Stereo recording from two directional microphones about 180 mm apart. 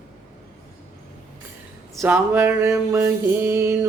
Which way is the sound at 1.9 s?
10° right (ahead or behind).